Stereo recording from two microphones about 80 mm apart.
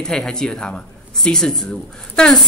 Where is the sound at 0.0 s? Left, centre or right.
Centre.